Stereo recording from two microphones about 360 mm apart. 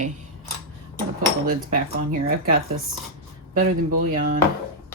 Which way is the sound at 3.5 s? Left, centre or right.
Right.